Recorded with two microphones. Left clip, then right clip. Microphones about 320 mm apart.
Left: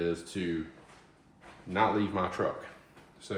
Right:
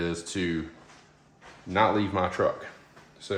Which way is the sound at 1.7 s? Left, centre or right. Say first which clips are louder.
Right 4 dB; right.